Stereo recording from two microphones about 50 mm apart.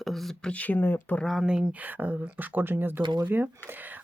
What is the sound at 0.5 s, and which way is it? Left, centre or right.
Speech, left.